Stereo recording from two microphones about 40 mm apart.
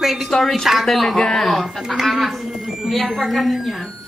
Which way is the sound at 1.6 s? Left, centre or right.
Centre.